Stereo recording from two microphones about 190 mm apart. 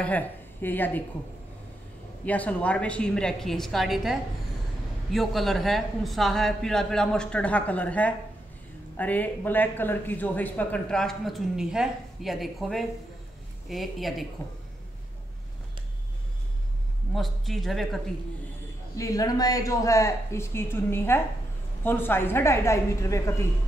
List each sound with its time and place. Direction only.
0.0 s a woman's voice: 10° left (ahead or behind)
2.2 s speech: 10° left (ahead or behind)
17.1 s speech: centre (ahead or behind)
18.9 s speech: 15° left (ahead or behind)